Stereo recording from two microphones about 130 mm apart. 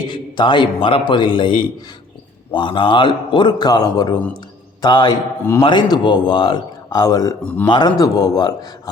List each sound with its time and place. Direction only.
0.1 s speech: 40° left (ahead or behind)
7.4 s speech: 10° left (ahead or behind)
7.7 s speech: 30° left (ahead or behind)